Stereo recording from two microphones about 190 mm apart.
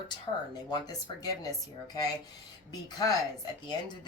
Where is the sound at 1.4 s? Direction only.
20° left (ahead or behind).